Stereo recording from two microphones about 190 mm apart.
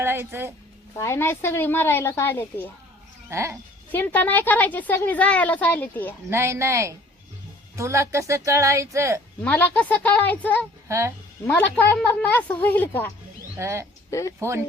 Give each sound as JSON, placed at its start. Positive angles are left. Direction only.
{"t": 0.0, "sound": "a woman's voice", "side_deg": -10}
{"t": 0.9, "sound": "a woman's voice", "side_deg": 15}
{"t": 3.2, "sound": "speech", "side_deg": -15}
{"t": 3.9, "sound": "a woman's voice", "side_deg": 10}
{"t": 6.3, "sound": "speech", "side_deg": -15}
{"t": 9.4, "sound": "a woman's voice", "side_deg": 10}
{"t": 10.8, "sound": "speech", "side_deg": -15}
{"t": 11.4, "sound": "a woman's voice", "side_deg": 10}
{"t": 13.6, "sound": "speech", "side_deg": -15}
{"t": 14.1, "sound": "a woman's voice", "side_deg": 15}
{"t": 14.3, "sound": "speech", "side_deg": -15}